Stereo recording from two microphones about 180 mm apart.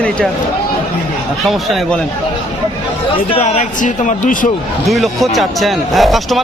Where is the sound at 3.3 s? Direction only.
35° left (ahead or behind).